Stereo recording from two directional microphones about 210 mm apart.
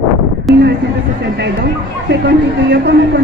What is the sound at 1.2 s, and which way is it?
Speech, 55° right (ahead or behind).